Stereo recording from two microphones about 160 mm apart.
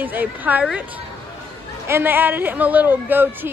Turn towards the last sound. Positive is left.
turn(degrees=-10)  # may be behind; listen again after turning